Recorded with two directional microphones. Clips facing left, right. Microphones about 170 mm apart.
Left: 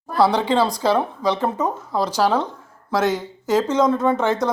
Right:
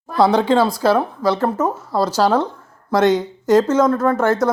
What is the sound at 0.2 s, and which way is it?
Speech, 15° right (ahead or behind).